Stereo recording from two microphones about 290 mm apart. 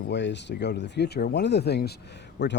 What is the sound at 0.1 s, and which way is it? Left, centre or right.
Speech, left.